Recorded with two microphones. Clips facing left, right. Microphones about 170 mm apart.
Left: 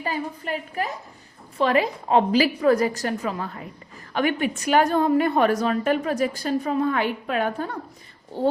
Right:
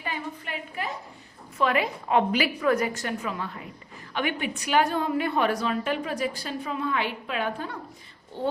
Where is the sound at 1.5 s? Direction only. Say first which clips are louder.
Left 4 dB; 35° left (ahead or behind).